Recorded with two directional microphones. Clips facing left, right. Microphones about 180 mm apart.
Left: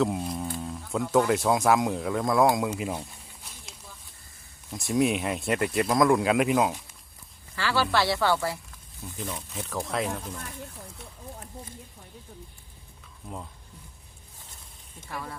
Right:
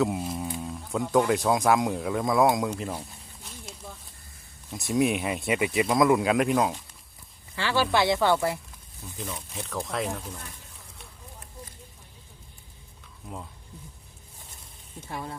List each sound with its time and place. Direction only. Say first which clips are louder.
0.0 s a sound: even; 5° right (ahead or behind)
1.3 s speech: even; centre (ahead or behind)
4.7 s speech: even; centre (ahead or behind)
7.5 s speech: right 1 dB; 20° right (ahead or behind)
9.2 s speech: left 1 dB; centre (ahead or behind)
13.2 s speech: even; centre (ahead or behind)
15.0 s speech: right 1 dB; 25° right (ahead or behind)